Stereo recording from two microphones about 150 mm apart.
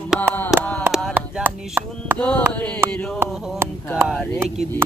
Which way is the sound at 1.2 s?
15° right (ahead or behind).